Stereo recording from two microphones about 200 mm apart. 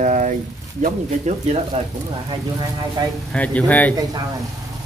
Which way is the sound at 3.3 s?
5° left (ahead or behind).